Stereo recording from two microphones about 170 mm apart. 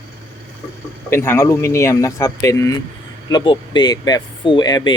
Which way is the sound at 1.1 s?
15° left (ahead or behind).